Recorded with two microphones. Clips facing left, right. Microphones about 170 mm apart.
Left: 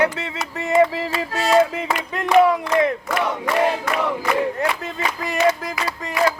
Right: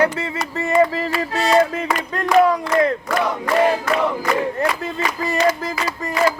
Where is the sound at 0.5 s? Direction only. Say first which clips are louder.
Even; 15° left (ahead or behind).